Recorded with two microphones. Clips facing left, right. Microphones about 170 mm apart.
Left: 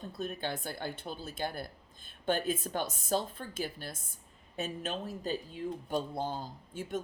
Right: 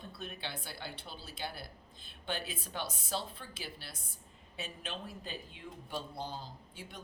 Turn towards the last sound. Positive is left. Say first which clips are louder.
# left 12 dB
turn(degrees=50)  # may be behind; listen again after turning